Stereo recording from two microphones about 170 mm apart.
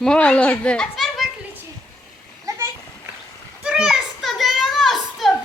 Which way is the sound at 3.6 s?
5° right (ahead or behind).